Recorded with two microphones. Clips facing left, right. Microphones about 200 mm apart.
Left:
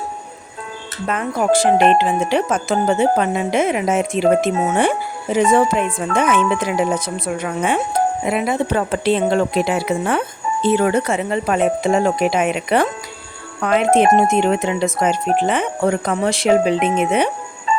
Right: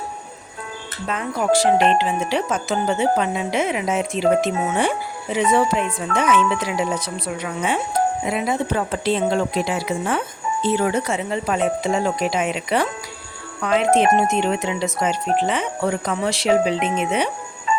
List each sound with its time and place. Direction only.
1.0 s speech: 55° left (ahead or behind)